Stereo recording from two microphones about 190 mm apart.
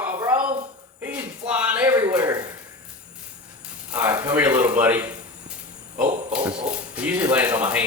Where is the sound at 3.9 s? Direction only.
10° right (ahead or behind).